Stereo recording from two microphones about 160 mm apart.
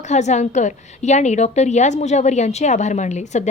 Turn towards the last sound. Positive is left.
turn(degrees=45)  # may be behind; listen again after turning